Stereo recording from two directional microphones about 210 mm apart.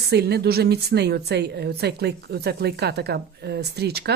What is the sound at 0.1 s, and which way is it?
A woman's voice, 50° right (ahead or behind).